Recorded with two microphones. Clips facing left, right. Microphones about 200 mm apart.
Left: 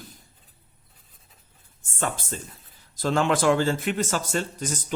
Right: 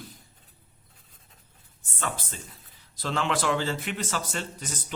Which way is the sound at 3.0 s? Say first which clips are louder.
Left 6 dB; 45° left (ahead or behind).